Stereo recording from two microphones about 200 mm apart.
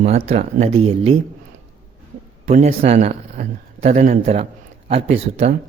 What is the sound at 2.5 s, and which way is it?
A man's voice, 30° right (ahead or behind).